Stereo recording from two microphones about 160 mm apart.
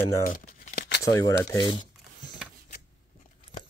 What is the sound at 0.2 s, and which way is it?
Scissors, 60° left (ahead or behind).